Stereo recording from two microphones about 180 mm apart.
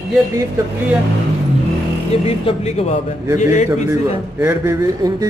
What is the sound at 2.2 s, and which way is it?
Speech, 35° left (ahead or behind).